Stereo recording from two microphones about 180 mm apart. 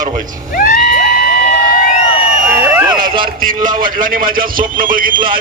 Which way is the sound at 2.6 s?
15° right (ahead or behind).